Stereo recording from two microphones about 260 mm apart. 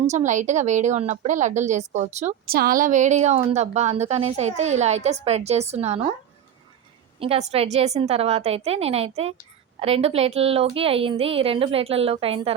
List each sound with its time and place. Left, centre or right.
0.1 s a woman's voice: right
7.2 s a woman's voice: right